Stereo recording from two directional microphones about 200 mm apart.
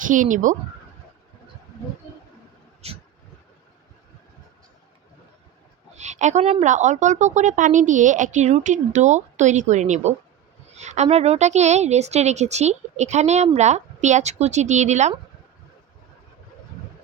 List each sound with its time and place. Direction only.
0.1 s a woman's voice: 40° right (ahead or behind)
2.8 s vehicle: 30° right (ahead or behind)
6.0 s a woman's voice: 35° right (ahead or behind)